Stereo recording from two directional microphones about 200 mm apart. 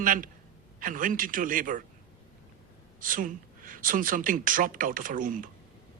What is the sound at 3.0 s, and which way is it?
Speech, 40° right (ahead or behind).